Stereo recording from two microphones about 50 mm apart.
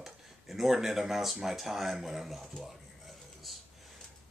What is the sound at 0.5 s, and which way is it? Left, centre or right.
Speech, centre.